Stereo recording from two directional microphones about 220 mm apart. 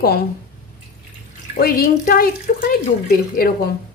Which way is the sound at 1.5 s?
45° left (ahead or behind).